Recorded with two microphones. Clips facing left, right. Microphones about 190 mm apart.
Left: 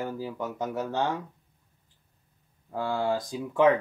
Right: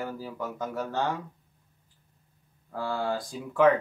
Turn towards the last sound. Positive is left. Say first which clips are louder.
# even
turn(degrees=20)  # may be behind; listen again after turning